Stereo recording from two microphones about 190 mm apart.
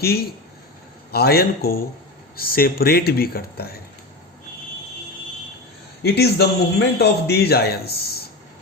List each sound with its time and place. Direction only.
1.1 s a man's voice: 55° left (ahead or behind)
6.0 s a man's voice: 55° left (ahead or behind)